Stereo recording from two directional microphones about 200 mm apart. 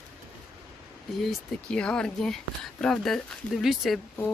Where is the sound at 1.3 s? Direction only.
5° left (ahead or behind).